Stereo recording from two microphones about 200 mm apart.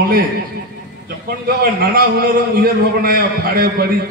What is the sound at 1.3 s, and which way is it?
A man's voice, 50° right (ahead or behind).